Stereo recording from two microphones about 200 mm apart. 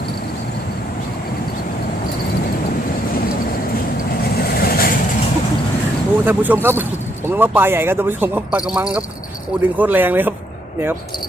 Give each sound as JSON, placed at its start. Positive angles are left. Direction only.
{"t": 4.2, "sound": "vehicle", "side_deg": 50}
{"t": 6.2, "sound": "speech", "side_deg": -10}